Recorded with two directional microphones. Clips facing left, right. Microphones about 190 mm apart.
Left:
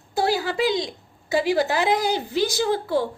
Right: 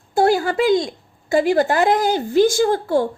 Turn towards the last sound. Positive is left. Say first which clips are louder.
# right 5 dB
turn(degrees=-50)  # may be behind; listen again after turning